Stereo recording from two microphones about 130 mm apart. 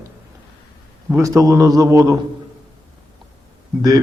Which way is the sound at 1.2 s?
25° right (ahead or behind).